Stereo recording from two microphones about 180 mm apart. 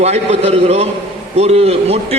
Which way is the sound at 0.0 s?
35° right (ahead or behind).